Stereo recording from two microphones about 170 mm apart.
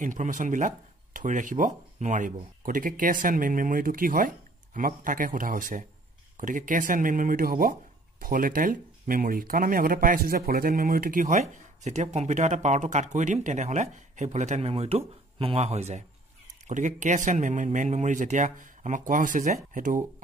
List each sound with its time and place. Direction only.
0.0 s speech: 50° right (ahead or behind)